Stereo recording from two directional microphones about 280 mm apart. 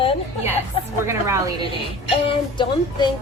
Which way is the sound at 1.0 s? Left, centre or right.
Centre.